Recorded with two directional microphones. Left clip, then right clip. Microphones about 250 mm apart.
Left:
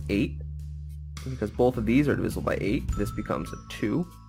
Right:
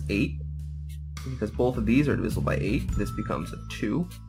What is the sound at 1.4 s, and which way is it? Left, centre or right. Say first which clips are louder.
Speech: left 2 dB; left.